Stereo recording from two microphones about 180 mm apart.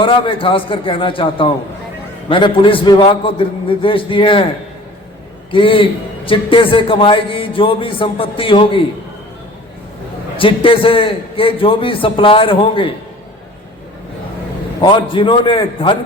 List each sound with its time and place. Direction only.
0.0 s a man's voice: 30° left (ahead or behind)
5.5 s a man's voice: 30° left (ahead or behind)
10.3 s a man's voice: 30° left (ahead or behind)
14.8 s a man's voice: 30° left (ahead or behind)